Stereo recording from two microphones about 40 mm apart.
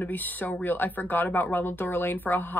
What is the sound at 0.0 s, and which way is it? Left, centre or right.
Speech, left.